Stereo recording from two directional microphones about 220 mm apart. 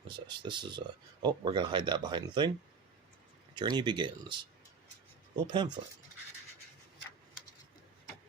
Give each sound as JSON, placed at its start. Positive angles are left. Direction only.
{"t": 0.1, "sound": "speech", "side_deg": -20}
{"t": 3.5, "sound": "speech", "side_deg": -20}
{"t": 5.4, "sound": "speech", "side_deg": -20}